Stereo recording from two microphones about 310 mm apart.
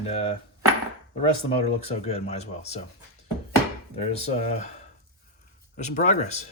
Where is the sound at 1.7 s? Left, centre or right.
Centre.